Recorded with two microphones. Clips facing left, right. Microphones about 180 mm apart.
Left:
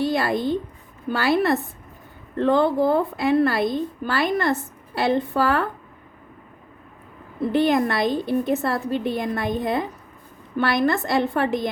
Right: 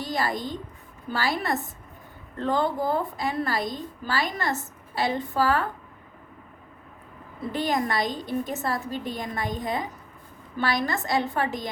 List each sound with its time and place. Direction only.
0.0 s speech: 60° left (ahead or behind)
7.5 s speech: 60° left (ahead or behind)